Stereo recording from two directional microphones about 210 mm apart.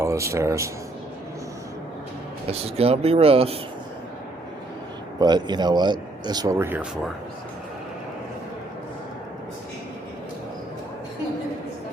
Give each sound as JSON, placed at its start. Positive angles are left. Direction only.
{"t": 0.0, "sound": "speech", "side_deg": -15}
{"t": 2.5, "sound": "speech", "side_deg": -30}
{"t": 5.2, "sound": "speech", "side_deg": -20}